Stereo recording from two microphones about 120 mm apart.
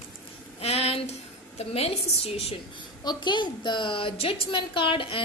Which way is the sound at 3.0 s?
40° left (ahead or behind).